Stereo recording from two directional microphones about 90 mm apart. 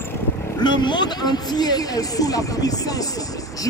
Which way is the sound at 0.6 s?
55° left (ahead or behind).